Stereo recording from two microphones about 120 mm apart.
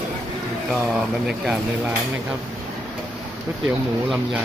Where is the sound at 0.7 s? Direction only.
5° right (ahead or behind).